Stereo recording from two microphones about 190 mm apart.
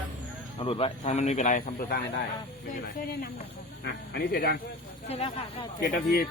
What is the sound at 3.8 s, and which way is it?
Speech, 60° left (ahead or behind).